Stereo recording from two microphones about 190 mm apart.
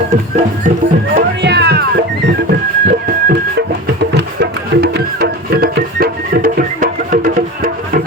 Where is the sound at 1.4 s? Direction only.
60° right (ahead or behind).